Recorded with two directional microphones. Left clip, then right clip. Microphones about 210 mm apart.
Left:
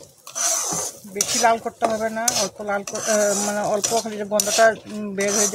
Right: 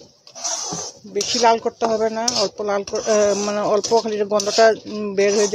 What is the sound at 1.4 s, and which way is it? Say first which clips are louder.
Speech: right 3 dB; 35° right (ahead or behind).